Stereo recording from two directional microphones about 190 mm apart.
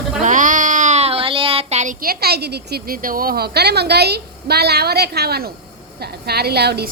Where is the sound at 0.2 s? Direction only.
40° right (ahead or behind); by 6.9 s 60° right (ahead or behind).